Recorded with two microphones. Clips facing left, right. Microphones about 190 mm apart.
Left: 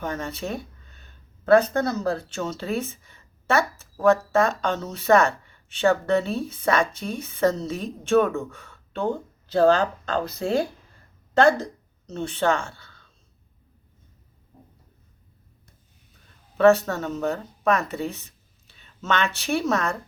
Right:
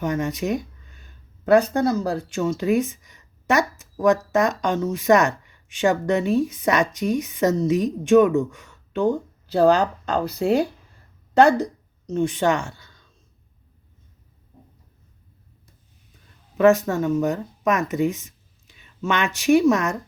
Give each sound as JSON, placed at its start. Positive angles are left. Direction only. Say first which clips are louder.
{"t": 0.0, "sound": "speech", "louder": "right 6 dB", "side_deg": -15}
{"t": 16.6, "sound": "speech", "louder": "right 1 dB", "side_deg": -15}